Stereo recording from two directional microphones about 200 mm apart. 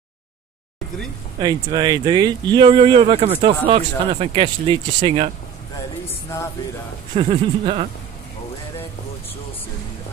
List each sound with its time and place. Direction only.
1.4 s speech: 20° right (ahead or behind)
7.2 s speech: 30° right (ahead or behind)